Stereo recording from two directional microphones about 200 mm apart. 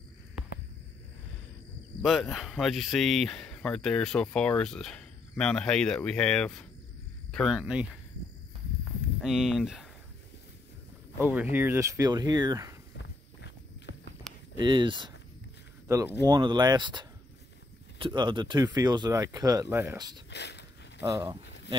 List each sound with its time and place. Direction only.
2.0 s speech: centre (ahead or behind)
9.2 s speech: centre (ahead or behind)
11.1 s speech: 10° right (ahead or behind)
12.9 s walk: 60° left (ahead or behind)
14.6 s speech: 25° right (ahead or behind)
20.2 s a sound: 60° left (ahead or behind)
21.0 s speech: 15° right (ahead or behind)